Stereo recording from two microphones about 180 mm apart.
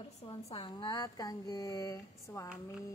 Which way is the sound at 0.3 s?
30° left (ahead or behind).